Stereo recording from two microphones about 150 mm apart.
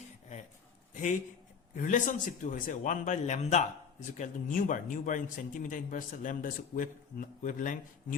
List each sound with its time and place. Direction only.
1.7 s speech: 60° left (ahead or behind)